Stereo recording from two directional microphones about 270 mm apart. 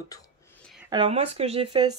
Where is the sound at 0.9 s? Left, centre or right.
Centre.